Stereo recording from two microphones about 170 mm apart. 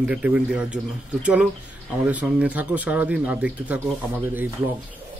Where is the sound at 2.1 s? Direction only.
10° right (ahead or behind).